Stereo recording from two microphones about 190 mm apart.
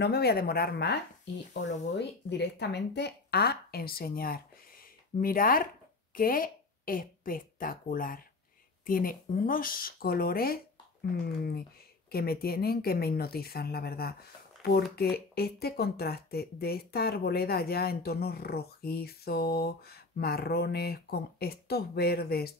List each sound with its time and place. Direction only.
0.0 s a woman's voice: 60° left (ahead or behind)